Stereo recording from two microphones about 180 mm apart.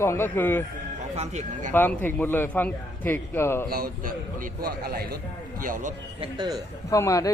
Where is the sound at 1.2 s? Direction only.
40° right (ahead or behind).